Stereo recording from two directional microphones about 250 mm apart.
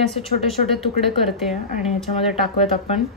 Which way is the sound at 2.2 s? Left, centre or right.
Left.